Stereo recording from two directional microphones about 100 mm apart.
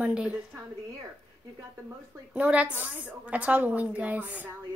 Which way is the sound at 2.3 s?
10° right (ahead or behind).